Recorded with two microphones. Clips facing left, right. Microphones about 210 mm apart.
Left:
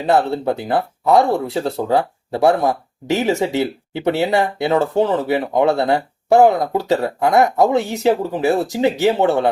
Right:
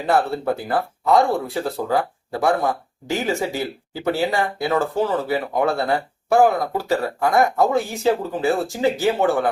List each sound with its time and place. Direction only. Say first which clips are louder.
0.0 s speech: left 3 dB; 20° left (ahead or behind)